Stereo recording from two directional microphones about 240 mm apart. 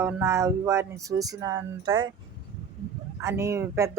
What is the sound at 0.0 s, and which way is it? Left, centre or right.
Speech, centre.